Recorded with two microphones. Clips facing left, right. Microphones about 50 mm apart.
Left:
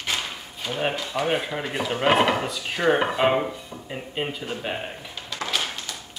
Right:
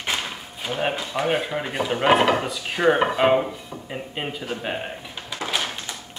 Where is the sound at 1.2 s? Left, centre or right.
Centre.